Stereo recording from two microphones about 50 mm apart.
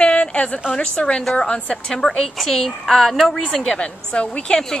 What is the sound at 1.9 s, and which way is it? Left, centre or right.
A woman's voice, centre.